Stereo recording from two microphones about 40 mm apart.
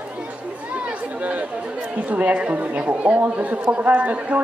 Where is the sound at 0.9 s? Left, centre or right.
Right.